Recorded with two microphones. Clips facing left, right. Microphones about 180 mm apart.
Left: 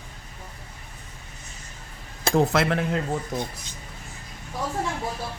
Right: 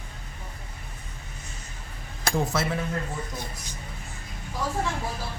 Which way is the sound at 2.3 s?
70° left (ahead or behind).